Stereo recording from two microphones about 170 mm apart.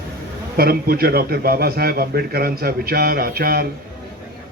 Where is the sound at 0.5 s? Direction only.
65° right (ahead or behind).